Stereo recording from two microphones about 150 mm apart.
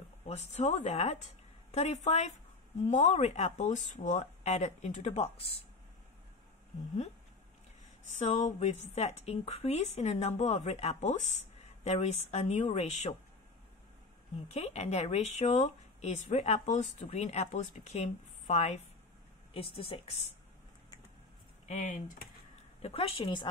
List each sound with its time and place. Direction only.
0.3 s speech: 45° left (ahead or behind)
8.2 s speech: 50° left (ahead or behind)
14.5 s speech: 45° left (ahead or behind)
21.6 s speech: 60° left (ahead or behind)
22.8 s speech: 40° left (ahead or behind)